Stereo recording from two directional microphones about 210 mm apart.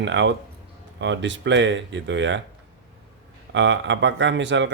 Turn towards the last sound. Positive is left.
turn(degrees=-60)  # may be behind; listen again after turning